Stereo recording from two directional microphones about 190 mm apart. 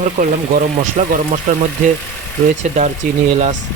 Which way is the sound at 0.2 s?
45° right (ahead or behind).